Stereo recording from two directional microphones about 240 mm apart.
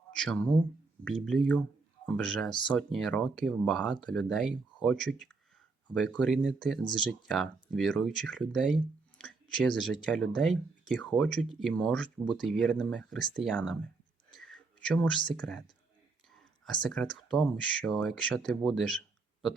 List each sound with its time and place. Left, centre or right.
0.1 s speech: centre
2.5 s speech: centre
2.7 s speech: centre
14.3 s a sound: centre
15.3 s speech: centre
16.8 s speech: centre